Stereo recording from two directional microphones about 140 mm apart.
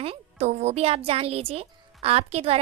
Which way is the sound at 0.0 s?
50° right (ahead or behind).